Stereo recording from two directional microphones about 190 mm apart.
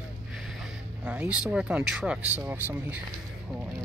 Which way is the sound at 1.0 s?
5° right (ahead or behind).